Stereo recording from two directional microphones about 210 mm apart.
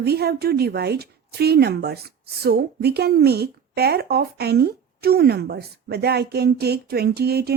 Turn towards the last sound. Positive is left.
turn(degrees=-50)  # may be behind; listen again after turning